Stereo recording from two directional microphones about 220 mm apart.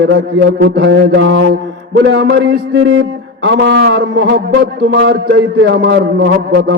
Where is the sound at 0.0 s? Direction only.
50° right (ahead or behind).